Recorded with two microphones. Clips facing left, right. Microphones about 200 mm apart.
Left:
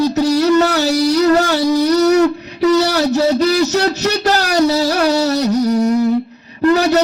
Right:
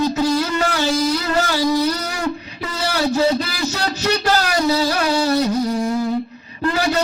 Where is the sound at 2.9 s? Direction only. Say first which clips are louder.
Left 4 dB; 40° left (ahead or behind).